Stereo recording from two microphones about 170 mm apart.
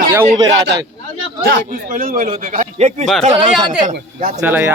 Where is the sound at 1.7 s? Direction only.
55° right (ahead or behind).